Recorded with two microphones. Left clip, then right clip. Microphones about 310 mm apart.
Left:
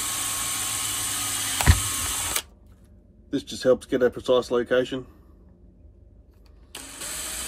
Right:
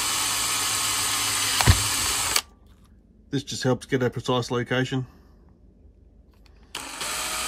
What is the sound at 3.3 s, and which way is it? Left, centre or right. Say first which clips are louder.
Speech: left 4 dB; right.